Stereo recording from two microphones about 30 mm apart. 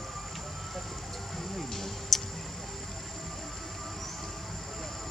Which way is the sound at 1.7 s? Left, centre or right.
Centre.